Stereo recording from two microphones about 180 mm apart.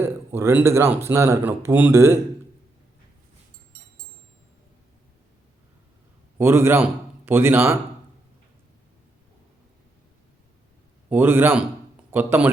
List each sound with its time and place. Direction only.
0.0 s speech: 15° right (ahead or behind)
6.4 s speech: 15° right (ahead or behind)
11.1 s speech: 10° right (ahead or behind)